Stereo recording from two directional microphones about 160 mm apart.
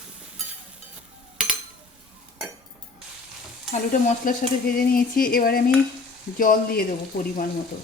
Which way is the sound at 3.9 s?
55° left (ahead or behind).